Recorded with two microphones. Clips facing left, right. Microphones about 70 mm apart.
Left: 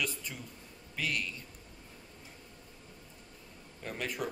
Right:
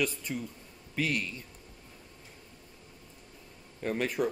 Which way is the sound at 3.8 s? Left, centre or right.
Right.